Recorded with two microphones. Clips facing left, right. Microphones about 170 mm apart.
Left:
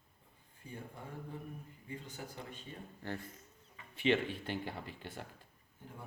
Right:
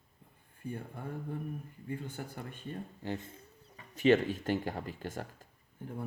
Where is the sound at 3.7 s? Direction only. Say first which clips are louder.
Right 6 dB; 40° right (ahead or behind).